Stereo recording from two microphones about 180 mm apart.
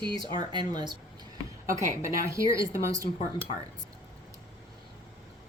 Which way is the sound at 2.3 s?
15° right (ahead or behind).